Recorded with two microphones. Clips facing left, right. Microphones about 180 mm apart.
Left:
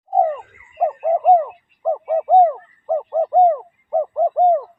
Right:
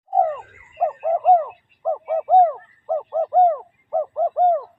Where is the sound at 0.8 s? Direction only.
5° left (ahead or behind).